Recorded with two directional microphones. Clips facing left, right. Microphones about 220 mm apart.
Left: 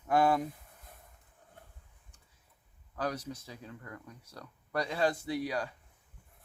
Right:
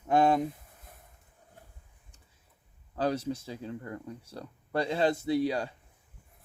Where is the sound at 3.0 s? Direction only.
30° right (ahead or behind).